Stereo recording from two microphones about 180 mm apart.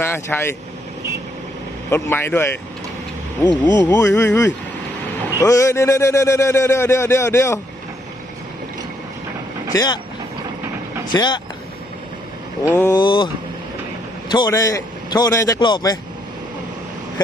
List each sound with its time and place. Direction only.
0.0 s a man's voice: 10° left (ahead or behind)
1.9 s a man's voice: 15° left (ahead or behind)
3.4 s a man's voice: 25° left (ahead or behind)
9.7 s a man's voice: 20° left (ahead or behind)
11.1 s a man's voice: 25° left (ahead or behind)
12.9 s a man's voice: 25° left (ahead or behind)